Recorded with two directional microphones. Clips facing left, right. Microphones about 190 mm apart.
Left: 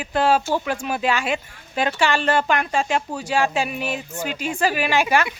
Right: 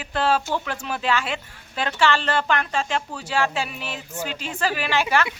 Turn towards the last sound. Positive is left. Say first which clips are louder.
# left 3 dB
turn(degrees=15)  # may be behind; listen again after turning